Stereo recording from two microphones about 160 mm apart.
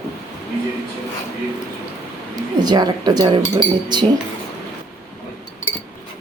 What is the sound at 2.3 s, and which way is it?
A man's voice, 25° right (ahead or behind).